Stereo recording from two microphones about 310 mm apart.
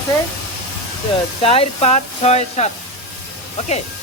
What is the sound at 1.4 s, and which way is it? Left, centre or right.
Speech, centre.